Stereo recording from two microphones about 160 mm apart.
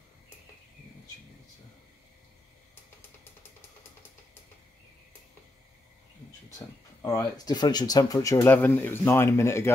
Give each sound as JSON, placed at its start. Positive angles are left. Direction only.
{"t": 7.0, "sound": "speech", "side_deg": 20}